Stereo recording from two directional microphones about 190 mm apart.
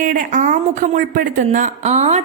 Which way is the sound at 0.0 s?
45° right (ahead or behind).